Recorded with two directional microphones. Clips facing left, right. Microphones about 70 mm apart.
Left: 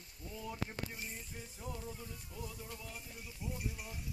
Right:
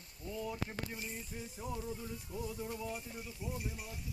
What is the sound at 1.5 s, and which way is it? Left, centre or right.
Music, centre.